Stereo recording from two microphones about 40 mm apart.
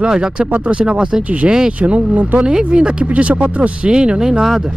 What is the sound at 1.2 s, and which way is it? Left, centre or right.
Speech, right.